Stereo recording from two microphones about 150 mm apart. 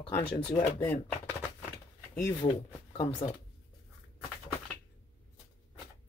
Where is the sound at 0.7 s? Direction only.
15° left (ahead or behind).